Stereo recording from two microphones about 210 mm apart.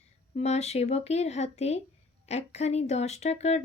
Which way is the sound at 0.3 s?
30° left (ahead or behind).